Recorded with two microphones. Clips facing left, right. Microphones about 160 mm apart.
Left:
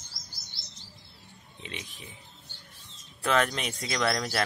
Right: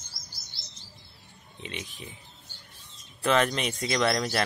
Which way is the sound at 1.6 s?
Centre (ahead or behind).